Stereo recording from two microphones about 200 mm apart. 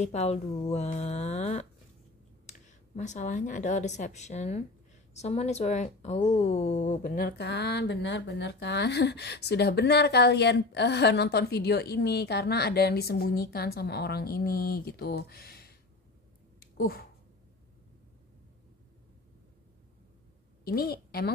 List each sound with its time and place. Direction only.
0.0 s speech: 35° left (ahead or behind)
3.0 s speech: 35° left (ahead or behind)
16.5 s a sound: 50° left (ahead or behind)
20.6 s a woman's voice: 50° left (ahead or behind)